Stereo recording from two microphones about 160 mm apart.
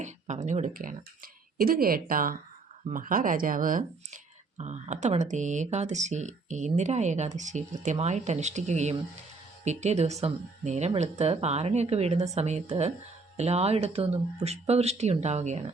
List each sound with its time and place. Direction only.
0.4 s speech: 50° right (ahead or behind)